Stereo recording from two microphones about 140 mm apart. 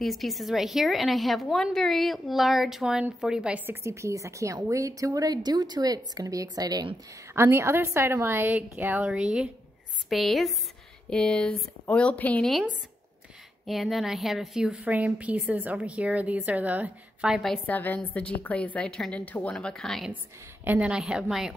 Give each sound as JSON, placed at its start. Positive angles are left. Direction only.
{"t": 0.0, "sound": "a woman's voice", "side_deg": 0}
{"t": 7.3, "sound": "a woman's voice", "side_deg": -15}
{"t": 13.7, "sound": "a woman's voice", "side_deg": 0}
{"t": 17.7, "sound": "speech", "side_deg": 10}
{"t": 20.6, "sound": "speech", "side_deg": -10}